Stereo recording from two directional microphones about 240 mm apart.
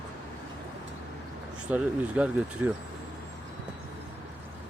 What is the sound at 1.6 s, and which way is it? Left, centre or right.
Speech, centre.